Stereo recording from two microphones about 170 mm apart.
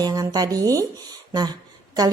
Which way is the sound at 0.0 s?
20° right (ahead or behind).